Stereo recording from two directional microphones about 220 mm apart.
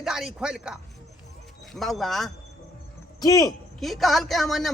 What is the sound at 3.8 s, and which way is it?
Speech, centre (ahead or behind).